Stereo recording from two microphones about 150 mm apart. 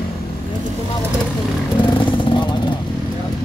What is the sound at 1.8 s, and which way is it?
Vehicle, 35° left (ahead or behind).